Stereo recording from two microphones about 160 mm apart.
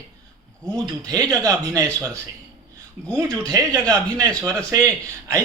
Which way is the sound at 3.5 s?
20° right (ahead or behind).